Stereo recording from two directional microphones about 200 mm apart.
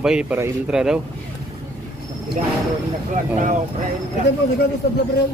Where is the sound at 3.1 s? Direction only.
40° right (ahead or behind).